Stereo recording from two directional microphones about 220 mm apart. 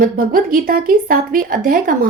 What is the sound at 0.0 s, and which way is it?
Speech, 40° right (ahead or behind).